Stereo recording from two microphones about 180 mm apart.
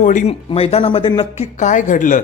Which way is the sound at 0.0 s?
45° left (ahead or behind).